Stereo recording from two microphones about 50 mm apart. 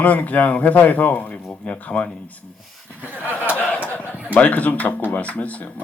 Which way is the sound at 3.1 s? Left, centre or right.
Right.